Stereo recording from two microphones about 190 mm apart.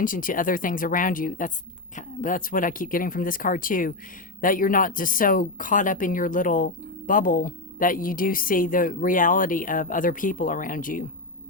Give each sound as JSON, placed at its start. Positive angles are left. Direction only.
{"t": 0.0, "sound": "speech", "side_deg": 45}